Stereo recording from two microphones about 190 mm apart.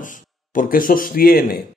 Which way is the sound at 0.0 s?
45° left (ahead or behind).